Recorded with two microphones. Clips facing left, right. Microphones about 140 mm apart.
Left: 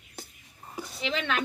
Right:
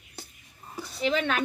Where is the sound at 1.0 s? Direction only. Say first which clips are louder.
Right 4 dB; 40° right (ahead or behind).